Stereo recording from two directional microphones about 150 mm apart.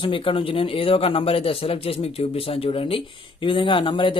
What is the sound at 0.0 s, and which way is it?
Speech, 35° left (ahead or behind).